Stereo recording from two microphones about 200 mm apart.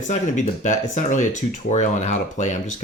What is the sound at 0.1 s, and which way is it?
Speech, 35° left (ahead or behind).